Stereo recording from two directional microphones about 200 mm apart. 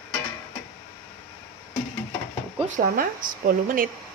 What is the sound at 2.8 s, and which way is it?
Speech, 45° right (ahead or behind).